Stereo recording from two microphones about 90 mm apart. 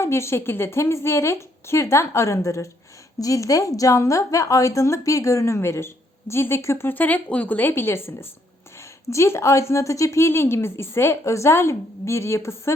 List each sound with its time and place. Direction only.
0.0 s a woman's voice: 30° left (ahead or behind)